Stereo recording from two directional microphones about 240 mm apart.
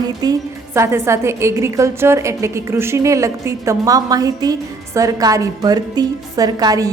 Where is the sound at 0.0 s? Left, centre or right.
Centre.